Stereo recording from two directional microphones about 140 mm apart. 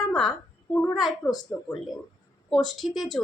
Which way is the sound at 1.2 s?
20° left (ahead or behind).